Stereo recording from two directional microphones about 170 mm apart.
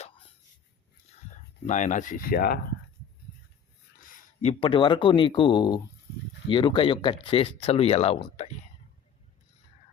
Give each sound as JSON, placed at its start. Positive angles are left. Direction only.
{"t": 1.6, "sound": "speech", "side_deg": 45}
{"t": 4.0, "sound": "speech", "side_deg": 40}